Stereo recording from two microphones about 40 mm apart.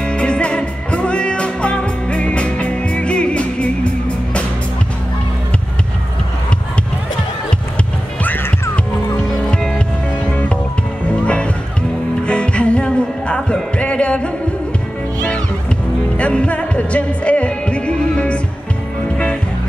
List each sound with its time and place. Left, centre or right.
0.0 s music: left
8.2 s music: left
11.2 s music: left
16.2 s music: left